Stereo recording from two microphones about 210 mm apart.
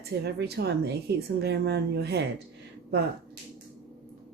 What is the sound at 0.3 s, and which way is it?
A woman's voice, 50° right (ahead or behind).